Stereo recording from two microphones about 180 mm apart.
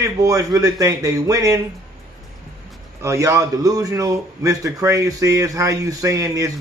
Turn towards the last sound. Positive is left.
turn(degrees=-15)  # may be behind; listen again after turning